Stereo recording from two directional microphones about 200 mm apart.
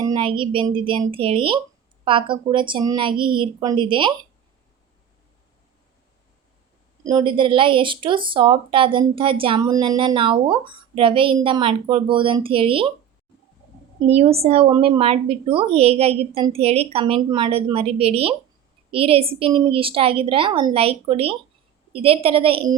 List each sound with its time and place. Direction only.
0.0 s speech: 25° right (ahead or behind)
7.0 s speech: 20° right (ahead or behind)
14.1 s speech: 30° right (ahead or behind)